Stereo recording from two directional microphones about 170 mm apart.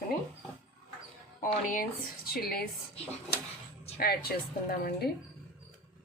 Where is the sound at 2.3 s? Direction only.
65° left (ahead or behind).